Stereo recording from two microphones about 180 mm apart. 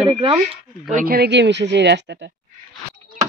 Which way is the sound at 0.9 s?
55° right (ahead or behind).